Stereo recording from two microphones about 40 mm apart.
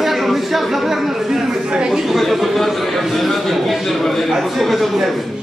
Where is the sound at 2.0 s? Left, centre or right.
Centre.